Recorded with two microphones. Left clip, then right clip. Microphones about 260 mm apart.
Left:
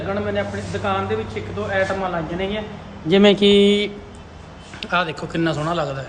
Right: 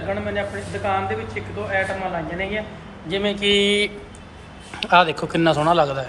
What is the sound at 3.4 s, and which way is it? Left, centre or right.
A man's voice, centre.